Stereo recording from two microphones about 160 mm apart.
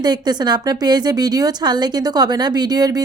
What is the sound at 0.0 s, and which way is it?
Speech, 25° right (ahead or behind).